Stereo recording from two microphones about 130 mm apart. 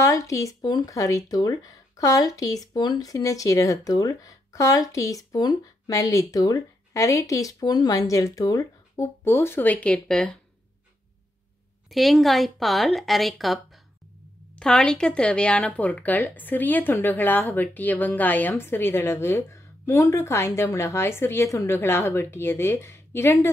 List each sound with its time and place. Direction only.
0.0 s speech: 25° left (ahead or behind); by 10.3 s 5° left (ahead or behind)
11.9 s speech: centre (ahead or behind); by 23.5 s 20° left (ahead or behind)